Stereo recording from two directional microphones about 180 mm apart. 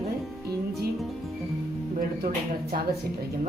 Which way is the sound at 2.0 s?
55° right (ahead or behind).